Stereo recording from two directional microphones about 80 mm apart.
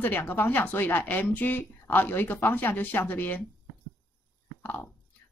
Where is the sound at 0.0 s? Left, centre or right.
Left.